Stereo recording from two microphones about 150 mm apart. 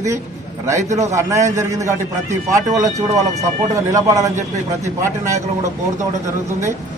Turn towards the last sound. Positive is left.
turn(degrees=-20)  # may be behind; listen again after turning